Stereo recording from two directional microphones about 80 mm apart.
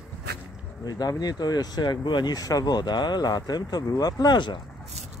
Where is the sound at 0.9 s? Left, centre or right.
Left.